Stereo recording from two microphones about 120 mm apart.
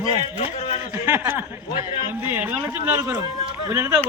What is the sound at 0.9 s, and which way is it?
Music, 20° right (ahead or behind).